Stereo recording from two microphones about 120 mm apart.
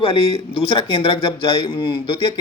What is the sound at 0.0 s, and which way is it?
Speech, 50° left (ahead or behind).